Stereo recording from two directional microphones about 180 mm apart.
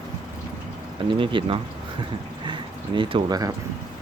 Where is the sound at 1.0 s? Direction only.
30° right (ahead or behind).